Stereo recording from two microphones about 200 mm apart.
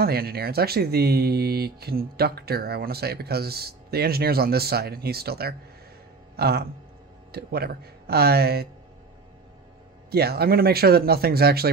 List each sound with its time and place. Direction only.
0.0 s speech: 50° right (ahead or behind)
10.1 s speech: 50° right (ahead or behind)